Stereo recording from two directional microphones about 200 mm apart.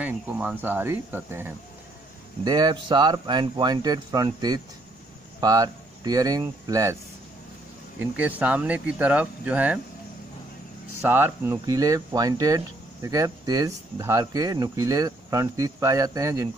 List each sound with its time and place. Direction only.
0.0 s speech: 5° right (ahead or behind)
8.0 s speech: 5° right (ahead or behind)
11.0 s speech: 10° right (ahead or behind)